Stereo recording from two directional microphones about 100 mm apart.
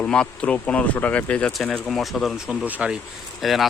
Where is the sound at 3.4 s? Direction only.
Centre (ahead or behind).